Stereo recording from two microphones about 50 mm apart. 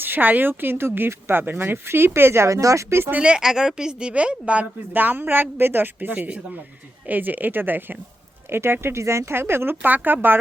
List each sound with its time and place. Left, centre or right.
0.0 s speech: right
3.2 s a woman's voice: centre
4.1 s a woman's voice: right
4.9 s speech: right